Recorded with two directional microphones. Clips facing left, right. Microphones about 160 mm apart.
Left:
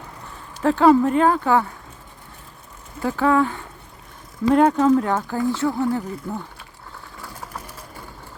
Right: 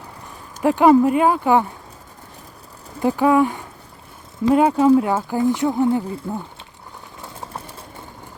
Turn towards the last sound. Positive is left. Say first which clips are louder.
# right 2 dB
turn(degrees=-25)  # may be behind; listen again after turning